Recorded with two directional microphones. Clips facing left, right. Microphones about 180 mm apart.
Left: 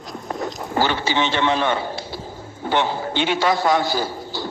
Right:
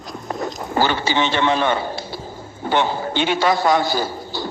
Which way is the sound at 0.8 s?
45° right (ahead or behind).